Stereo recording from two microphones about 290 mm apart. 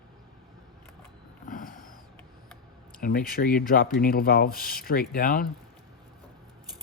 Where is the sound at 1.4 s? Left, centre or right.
Left.